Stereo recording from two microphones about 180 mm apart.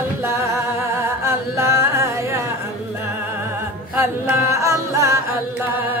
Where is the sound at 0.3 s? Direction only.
15° right (ahead or behind).